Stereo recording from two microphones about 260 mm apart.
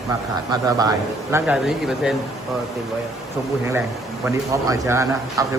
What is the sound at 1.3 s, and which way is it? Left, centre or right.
Speech, centre.